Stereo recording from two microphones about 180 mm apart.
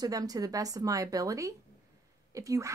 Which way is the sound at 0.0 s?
20° right (ahead or behind).